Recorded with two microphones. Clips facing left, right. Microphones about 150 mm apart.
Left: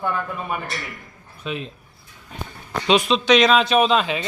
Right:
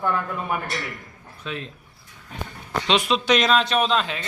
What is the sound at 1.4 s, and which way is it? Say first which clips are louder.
Speech: left 3 dB; 15° left (ahead or behind).